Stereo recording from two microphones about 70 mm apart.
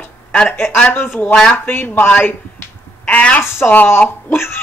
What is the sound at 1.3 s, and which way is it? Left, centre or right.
Speech, centre.